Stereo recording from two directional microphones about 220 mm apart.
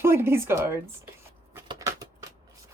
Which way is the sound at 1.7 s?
15° right (ahead or behind).